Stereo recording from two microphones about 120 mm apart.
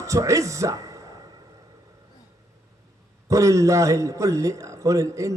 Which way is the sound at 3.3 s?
25° right (ahead or behind).